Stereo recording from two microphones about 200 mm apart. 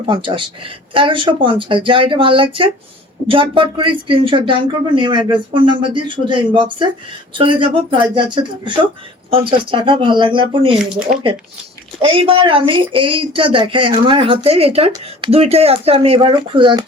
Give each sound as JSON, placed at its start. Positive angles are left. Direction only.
{"t": 0.1, "sound": "speech", "side_deg": -25}
{"t": 12.0, "sound": "speech", "side_deg": -25}